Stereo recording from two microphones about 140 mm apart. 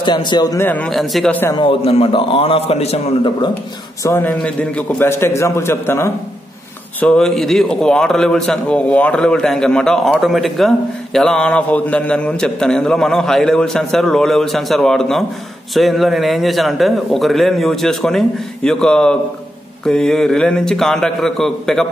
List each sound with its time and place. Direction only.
0.0 s a man's voice: 35° left (ahead or behind)
0.6 s a man's voice: 10° left (ahead or behind)
1.5 s a man's voice: 35° left (ahead or behind)
4.0 s a man's voice: 15° left (ahead or behind)
7.0 s a man's voice: 5° left (ahead or behind)